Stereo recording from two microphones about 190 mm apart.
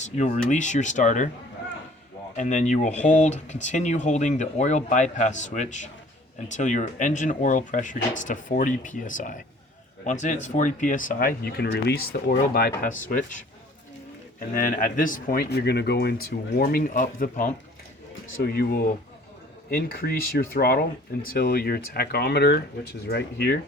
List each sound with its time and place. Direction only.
0.0 s speech: 40° left (ahead or behind)
2.3 s speech: 40° left (ahead or behind)
14.5 s speech: 45° left (ahead or behind)